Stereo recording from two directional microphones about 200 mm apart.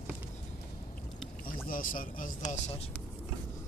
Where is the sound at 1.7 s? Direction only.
40° left (ahead or behind).